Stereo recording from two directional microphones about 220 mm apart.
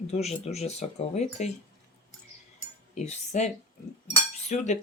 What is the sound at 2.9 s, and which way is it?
Speech, 30° left (ahead or behind).